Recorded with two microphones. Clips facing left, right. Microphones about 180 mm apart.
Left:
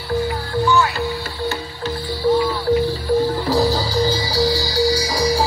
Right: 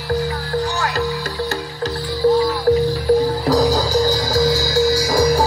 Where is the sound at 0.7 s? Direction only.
40° right (ahead or behind).